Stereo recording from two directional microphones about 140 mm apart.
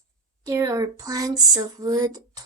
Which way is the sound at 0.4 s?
25° right (ahead or behind).